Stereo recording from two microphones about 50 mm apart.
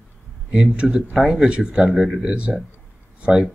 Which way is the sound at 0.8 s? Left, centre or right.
Centre.